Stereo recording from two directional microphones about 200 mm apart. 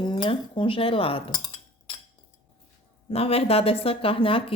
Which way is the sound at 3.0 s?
30° left (ahead or behind).